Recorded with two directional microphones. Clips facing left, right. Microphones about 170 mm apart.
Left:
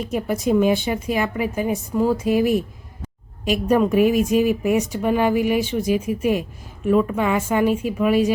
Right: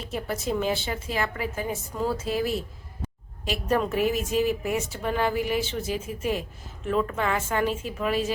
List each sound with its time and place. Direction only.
0.0 s a woman's voice: 15° left (ahead or behind)